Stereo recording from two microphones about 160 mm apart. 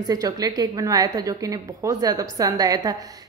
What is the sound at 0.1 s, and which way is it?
A woman's voice, 25° right (ahead or behind).